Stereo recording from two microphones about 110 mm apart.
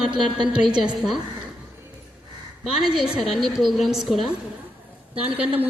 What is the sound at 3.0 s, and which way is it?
A woman's voice, centre (ahead or behind).